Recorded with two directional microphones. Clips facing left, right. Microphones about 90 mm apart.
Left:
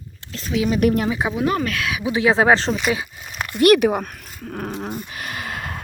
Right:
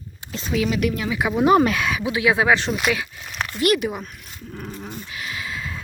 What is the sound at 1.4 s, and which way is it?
Speech, 15° right (ahead or behind).